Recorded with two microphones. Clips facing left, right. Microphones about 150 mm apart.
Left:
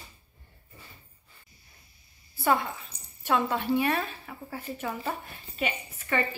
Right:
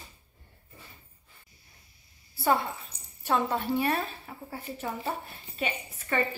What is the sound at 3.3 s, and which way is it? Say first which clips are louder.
A woman's voice: left 1 dB; 35° right (ahead or behind).